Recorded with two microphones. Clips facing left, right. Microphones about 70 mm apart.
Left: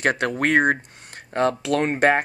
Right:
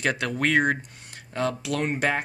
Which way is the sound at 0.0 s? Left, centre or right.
Left.